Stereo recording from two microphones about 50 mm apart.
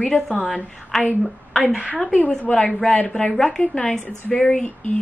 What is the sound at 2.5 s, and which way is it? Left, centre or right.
Speech, left.